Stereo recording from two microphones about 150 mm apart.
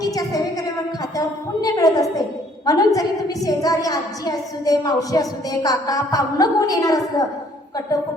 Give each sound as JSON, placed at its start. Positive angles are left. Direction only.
{"t": 0.0, "sound": "a woman's voice", "side_deg": 25}
{"t": 1.6, "sound": "a woman's voice", "side_deg": 25}